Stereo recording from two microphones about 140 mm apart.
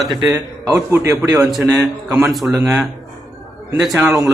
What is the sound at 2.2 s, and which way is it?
Speech, centre (ahead or behind).